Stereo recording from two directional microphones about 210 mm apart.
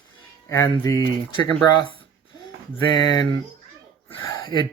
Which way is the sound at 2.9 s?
20° left (ahead or behind).